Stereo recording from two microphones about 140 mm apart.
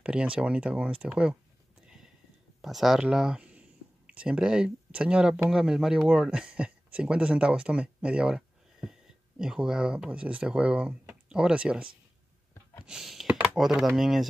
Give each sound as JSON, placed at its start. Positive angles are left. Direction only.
{"t": 0.0, "sound": "speech", "side_deg": -5}
{"t": 2.6, "sound": "speech", "side_deg": 0}